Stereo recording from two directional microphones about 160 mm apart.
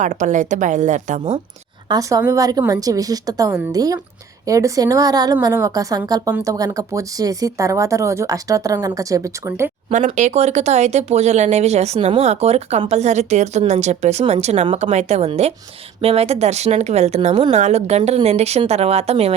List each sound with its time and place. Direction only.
0.0 s speech: 50° right (ahead or behind)
1.9 s speech: 20° right (ahead or behind)
10.2 s speech: 45° right (ahead or behind)